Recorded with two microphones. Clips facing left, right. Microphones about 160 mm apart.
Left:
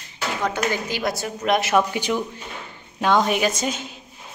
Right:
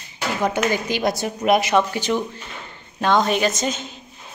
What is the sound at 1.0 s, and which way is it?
Speech, 20° right (ahead or behind).